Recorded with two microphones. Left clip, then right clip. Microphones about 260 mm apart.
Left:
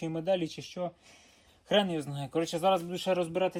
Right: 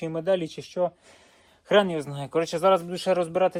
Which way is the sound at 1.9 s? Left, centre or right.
Right.